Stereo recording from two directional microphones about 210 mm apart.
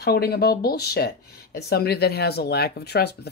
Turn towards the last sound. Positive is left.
turn(degrees=50)  # may be behind; listen again after turning